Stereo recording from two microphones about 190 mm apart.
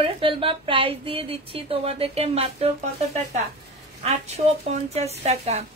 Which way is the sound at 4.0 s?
35° right (ahead or behind).